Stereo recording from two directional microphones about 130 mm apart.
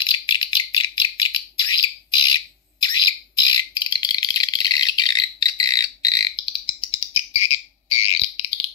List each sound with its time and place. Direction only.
0.0 s bird: 35° left (ahead or behind)
6.6 s bird: 50° left (ahead or behind)